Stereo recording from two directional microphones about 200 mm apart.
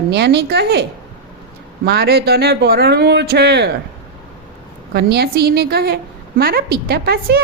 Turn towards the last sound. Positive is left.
turn(degrees=-50)  # may be behind; listen again after turning